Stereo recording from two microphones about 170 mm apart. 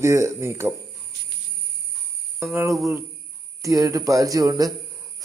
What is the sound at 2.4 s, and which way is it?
Speech, 15° right (ahead or behind).